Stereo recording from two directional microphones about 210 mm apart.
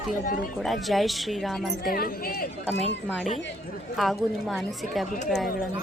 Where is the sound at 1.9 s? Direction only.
45° left (ahead or behind).